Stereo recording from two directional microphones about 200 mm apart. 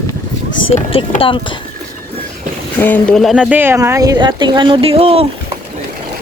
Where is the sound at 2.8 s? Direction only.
5° left (ahead or behind); by 5.3 s 30° right (ahead or behind).